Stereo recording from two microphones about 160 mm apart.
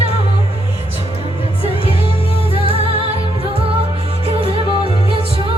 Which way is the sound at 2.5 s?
35° left (ahead or behind).